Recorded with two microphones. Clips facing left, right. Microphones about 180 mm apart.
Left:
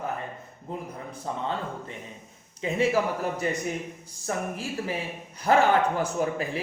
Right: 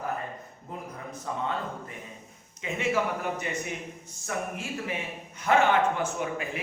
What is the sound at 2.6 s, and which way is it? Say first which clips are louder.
Speech: left 4 dB; 35° left (ahead or behind).